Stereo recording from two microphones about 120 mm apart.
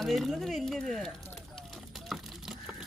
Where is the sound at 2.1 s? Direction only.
5° right (ahead or behind).